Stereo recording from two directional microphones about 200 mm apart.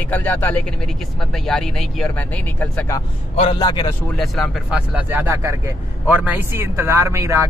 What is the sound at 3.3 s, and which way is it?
Speech, 25° left (ahead or behind).